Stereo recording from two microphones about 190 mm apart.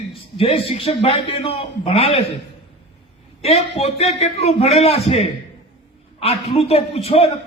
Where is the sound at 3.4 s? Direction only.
30° left (ahead or behind).